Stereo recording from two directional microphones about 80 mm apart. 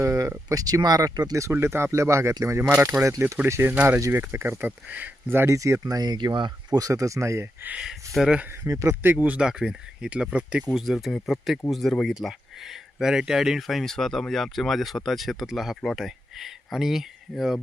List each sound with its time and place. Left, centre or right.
0.0 s speech: right
1.4 s speech: right
3.6 s speech: right
4.6 s speech: right
5.5 s speech: right
6.7 s speech: right
7.8 s speech: centre
8.6 s speech: right
9.0 s speech: centre
10.8 s speech: centre